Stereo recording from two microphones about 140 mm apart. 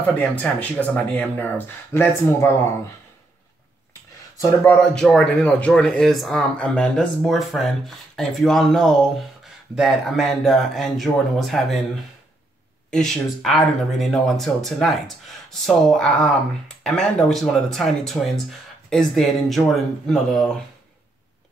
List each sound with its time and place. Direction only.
0.0 s speech: 10° left (ahead or behind)
4.9 s speech: 5° left (ahead or behind)
12.9 s speech: centre (ahead or behind)